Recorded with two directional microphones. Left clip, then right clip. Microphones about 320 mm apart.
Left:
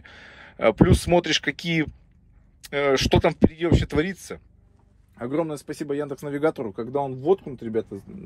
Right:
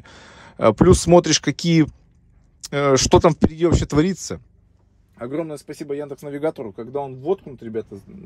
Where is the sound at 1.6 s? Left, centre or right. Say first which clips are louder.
Right 5 dB; centre.